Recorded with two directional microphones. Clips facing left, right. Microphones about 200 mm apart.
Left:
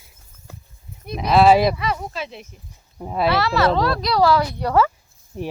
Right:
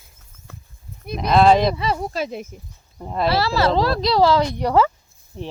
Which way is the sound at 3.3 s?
30° right (ahead or behind).